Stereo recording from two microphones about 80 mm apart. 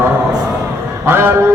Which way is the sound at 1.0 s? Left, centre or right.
Right.